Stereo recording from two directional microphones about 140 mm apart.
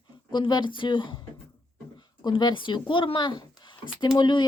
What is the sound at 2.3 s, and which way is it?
A woman's voice, 30° left (ahead or behind).